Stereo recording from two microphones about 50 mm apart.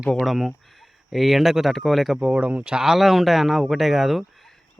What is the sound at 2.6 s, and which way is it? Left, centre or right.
Speech, centre.